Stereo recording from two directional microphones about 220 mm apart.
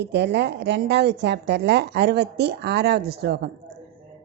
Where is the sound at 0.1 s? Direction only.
50° right (ahead or behind).